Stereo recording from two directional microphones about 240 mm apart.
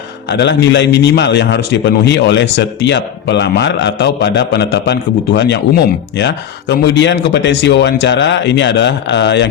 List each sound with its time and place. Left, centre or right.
0.3 s a man's voice: left